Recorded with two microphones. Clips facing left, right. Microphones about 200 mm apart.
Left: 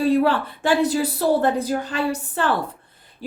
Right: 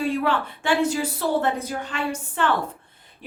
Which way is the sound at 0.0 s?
35° left (ahead or behind).